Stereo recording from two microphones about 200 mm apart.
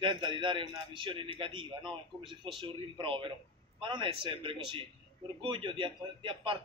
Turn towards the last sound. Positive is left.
turn(degrees=-25)  # may be behind; listen again after turning